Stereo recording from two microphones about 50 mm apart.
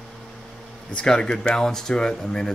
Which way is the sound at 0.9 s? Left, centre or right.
Centre.